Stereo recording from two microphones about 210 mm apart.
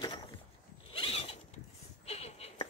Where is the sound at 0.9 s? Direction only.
25° left (ahead or behind).